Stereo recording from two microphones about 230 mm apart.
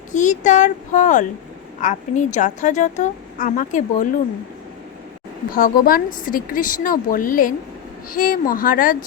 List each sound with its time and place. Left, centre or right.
0.1 s speech: left
5.5 s speech: left